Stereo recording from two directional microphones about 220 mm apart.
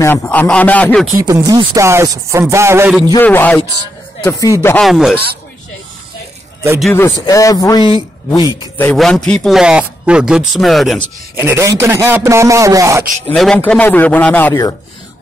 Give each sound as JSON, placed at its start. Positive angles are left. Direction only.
{"t": 0.0, "sound": "a man's voice", "side_deg": 10}
{"t": 1.1, "sound": "speech", "side_deg": -15}
{"t": 3.1, "sound": "a man's voice", "side_deg": 10}
{"t": 4.8, "sound": "a man's voice", "side_deg": 0}
{"t": 6.8, "sound": "a man's voice", "side_deg": 10}
{"t": 8.7, "sound": "a man's voice", "side_deg": 5}
{"t": 11.3, "sound": "speech", "side_deg": -10}
{"t": 13.3, "sound": "a man's voice", "side_deg": 5}